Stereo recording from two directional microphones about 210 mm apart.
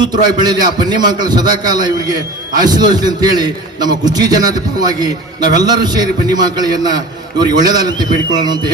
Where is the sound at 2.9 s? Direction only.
20° right (ahead or behind).